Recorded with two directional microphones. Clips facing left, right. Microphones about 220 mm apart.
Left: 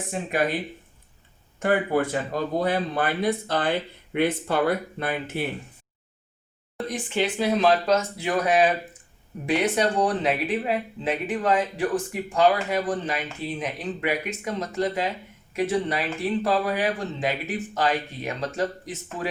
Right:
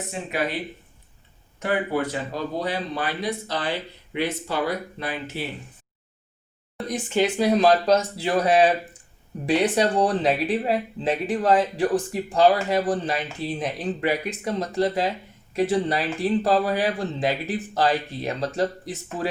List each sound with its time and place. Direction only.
0.1 s speech: 50° left (ahead or behind)
1.5 s speech: 50° left (ahead or behind)
6.8 s speech: 45° right (ahead or behind)
9.7 s speech: 35° right (ahead or behind)